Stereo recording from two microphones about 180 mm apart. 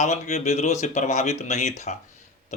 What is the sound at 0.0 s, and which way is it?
Speech, 40° left (ahead or behind).